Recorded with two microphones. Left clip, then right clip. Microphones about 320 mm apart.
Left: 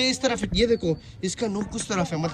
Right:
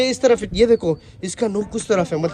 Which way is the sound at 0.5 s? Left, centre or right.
Centre.